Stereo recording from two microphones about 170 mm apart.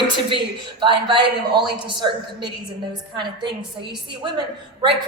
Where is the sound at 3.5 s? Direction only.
75° right (ahead or behind).